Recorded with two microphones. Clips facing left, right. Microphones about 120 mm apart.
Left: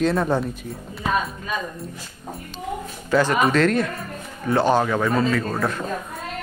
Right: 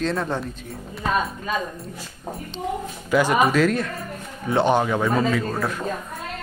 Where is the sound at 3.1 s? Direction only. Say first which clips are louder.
Even; 10° right (ahead or behind).